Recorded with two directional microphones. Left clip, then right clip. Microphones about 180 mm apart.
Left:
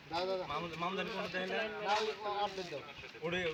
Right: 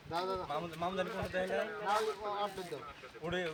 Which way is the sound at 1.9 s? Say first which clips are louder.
Right 1 dB; 10° left (ahead or behind).